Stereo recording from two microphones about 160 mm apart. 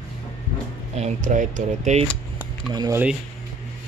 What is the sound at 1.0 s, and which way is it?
Speech, 50° right (ahead or behind).